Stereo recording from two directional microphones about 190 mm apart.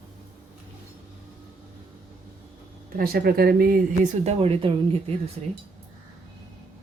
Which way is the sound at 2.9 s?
50° right (ahead or behind).